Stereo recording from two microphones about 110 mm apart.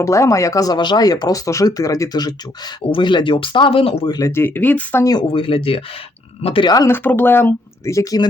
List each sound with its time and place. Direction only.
0.0 s speech: 30° left (ahead or behind)
2.8 s speech: 50° left (ahead or behind)
4.0 s speech: 35° left (ahead or behind)
4.3 s speech: 20° left (ahead or behind)
5.3 s speech: 55° left (ahead or behind)
6.8 s speech: 20° left (ahead or behind); by 8.3 s 35° left (ahead or behind)